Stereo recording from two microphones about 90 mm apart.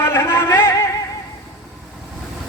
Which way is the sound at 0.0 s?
30° left (ahead or behind).